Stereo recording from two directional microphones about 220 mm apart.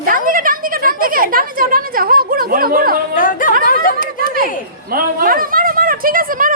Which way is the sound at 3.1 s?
40° left (ahead or behind).